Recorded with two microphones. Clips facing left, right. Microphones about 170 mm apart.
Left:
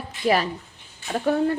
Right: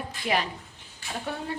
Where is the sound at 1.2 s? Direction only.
55° left (ahead or behind).